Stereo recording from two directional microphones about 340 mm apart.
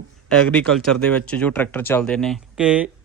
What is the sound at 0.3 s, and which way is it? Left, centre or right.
Speech, centre.